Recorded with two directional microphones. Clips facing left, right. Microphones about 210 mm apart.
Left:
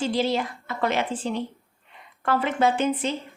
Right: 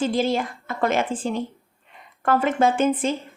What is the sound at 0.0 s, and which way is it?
Speech, 50° right (ahead or behind).